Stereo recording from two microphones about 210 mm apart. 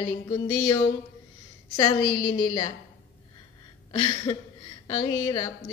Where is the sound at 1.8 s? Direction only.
20° left (ahead or behind).